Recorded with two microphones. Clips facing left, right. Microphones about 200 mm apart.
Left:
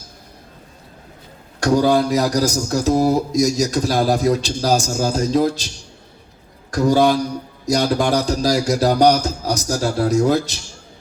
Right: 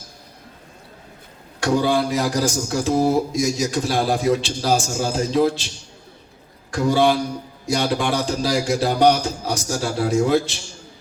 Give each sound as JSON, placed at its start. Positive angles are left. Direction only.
{"t": 1.6, "sound": "speech", "side_deg": 40}